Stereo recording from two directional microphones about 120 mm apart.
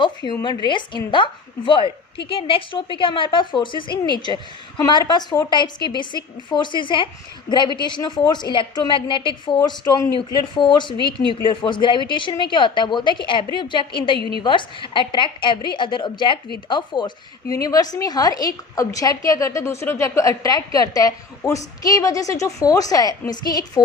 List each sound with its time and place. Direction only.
0.0 s a sound: 40° left (ahead or behind)
0.4 s a woman's voice: 40° left (ahead or behind)
9.6 s a woman's voice: 30° left (ahead or behind)
17.5 s a woman's voice: 30° left (ahead or behind)